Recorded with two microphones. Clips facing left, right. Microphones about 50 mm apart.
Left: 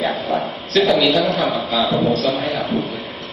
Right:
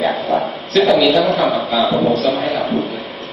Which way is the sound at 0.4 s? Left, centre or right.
Centre.